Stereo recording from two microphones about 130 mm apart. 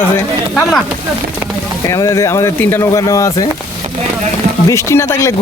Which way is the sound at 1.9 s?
25° left (ahead or behind).